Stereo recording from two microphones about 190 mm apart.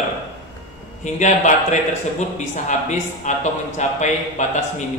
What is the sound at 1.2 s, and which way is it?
Speech, 40° left (ahead or behind).